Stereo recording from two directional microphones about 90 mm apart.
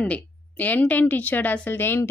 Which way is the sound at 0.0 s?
20° left (ahead or behind).